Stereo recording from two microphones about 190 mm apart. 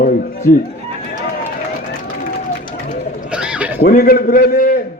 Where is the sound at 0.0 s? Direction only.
50° left (ahead or behind).